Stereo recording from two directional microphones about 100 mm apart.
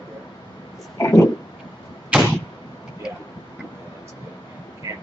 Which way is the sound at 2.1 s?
10° right (ahead or behind).